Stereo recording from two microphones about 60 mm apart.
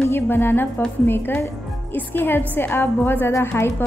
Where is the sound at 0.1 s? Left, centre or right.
Left.